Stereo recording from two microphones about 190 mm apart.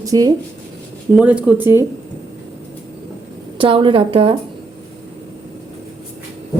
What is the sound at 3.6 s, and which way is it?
Speech, 25° right (ahead or behind).